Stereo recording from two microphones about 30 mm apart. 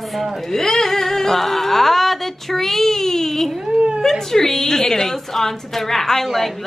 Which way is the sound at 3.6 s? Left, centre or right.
Right.